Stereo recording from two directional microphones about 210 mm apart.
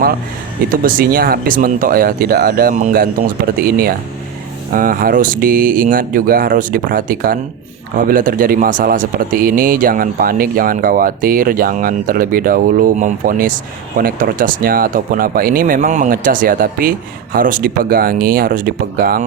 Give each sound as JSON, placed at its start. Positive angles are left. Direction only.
{"t": 0.7, "sound": "speech", "side_deg": -40}